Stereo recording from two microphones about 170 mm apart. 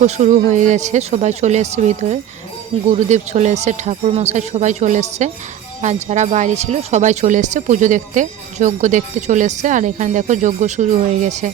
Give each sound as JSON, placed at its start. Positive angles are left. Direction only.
{"t": 0.0, "sound": "speech", "side_deg": -45}